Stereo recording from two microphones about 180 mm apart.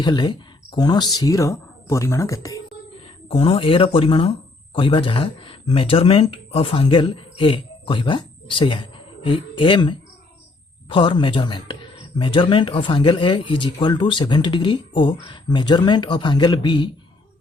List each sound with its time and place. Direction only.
0.0 s speech: 25° left (ahead or behind)
3.2 s speech: 30° left (ahead or behind)